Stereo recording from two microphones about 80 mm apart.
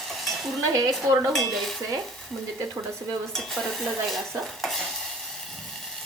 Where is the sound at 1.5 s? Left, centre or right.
Centre.